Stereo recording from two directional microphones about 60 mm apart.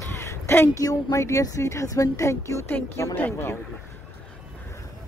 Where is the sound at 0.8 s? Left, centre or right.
Left.